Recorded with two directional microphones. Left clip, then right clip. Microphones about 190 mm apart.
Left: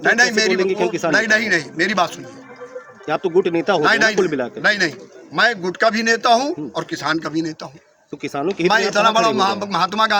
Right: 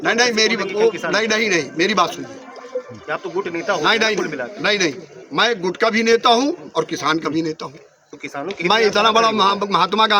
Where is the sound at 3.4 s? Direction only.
25° left (ahead or behind).